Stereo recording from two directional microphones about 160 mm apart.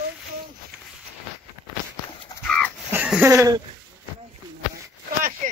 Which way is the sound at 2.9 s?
10° right (ahead or behind).